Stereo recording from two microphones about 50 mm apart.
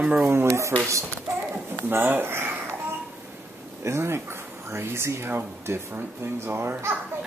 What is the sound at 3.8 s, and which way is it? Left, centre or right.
Speech, right.